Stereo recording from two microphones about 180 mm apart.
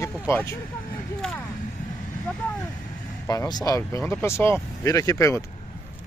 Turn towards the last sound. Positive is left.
turn(degrees=15)  # may be behind; listen again after turning